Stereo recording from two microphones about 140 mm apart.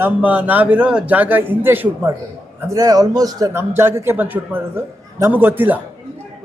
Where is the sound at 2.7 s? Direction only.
25° right (ahead or behind).